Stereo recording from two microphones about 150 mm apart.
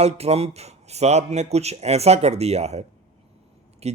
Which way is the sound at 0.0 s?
45° right (ahead or behind).